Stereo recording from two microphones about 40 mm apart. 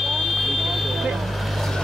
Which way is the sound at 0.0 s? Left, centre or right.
Centre.